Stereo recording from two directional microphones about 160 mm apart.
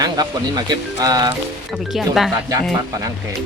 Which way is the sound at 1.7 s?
Centre (ahead or behind).